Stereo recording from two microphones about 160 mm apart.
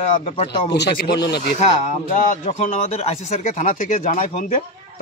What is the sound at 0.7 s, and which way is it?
Speech, 90° left.